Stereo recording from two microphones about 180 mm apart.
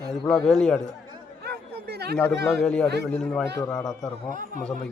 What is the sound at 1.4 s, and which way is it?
Chatter, 65° right (ahead or behind).